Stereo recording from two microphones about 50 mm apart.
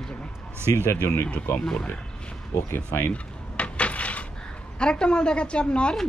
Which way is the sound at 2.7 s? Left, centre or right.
Left.